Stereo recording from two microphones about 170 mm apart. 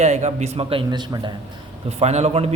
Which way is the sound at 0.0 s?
40° right (ahead or behind).